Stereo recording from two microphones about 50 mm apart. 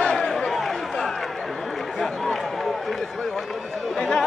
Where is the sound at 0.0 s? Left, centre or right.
Centre.